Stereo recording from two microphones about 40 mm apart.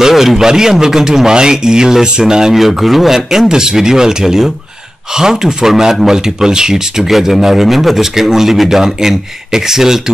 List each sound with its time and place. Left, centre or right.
0.1 s a man's voice: centre
2.5 s a man's voice: centre
7.0 s a man's voice: centre